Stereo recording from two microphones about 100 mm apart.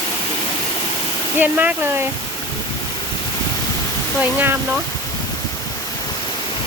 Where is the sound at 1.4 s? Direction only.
20° right (ahead or behind).